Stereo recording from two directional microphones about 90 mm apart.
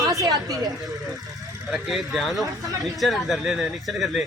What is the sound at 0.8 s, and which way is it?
Speech, centre (ahead or behind).